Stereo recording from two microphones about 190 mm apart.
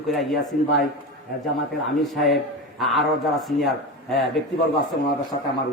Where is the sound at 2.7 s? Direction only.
Centre (ahead or behind).